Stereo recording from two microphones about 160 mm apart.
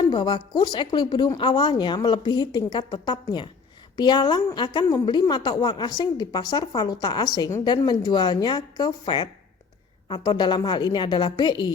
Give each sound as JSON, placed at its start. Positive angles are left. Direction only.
{"t": 0.0, "sound": "a woman's voice", "side_deg": 30}